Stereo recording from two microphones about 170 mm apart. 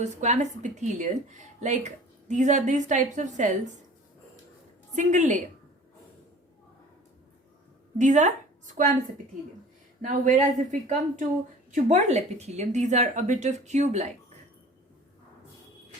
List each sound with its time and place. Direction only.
0.0 s speech: 45° right (ahead or behind)
4.9 s speech: 45° right (ahead or behind)
7.9 s a woman's voice: 45° right (ahead or behind)
10.0 s a woman's voice: 45° right (ahead or behind)